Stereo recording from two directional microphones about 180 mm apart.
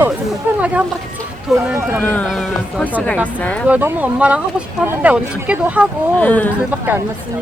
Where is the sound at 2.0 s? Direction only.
10° left (ahead or behind).